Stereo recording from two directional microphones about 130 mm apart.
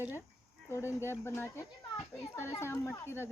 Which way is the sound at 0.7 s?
20° left (ahead or behind).